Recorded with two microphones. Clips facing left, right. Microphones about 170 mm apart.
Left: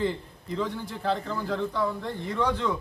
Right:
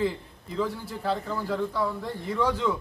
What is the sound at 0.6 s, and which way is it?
A man's voice, 5° right (ahead or behind).